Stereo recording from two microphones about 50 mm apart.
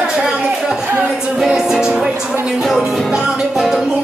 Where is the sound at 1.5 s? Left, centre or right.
Centre.